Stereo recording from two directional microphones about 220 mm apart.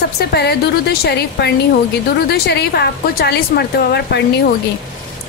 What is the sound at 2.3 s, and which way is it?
A woman's voice, 45° left (ahead or behind).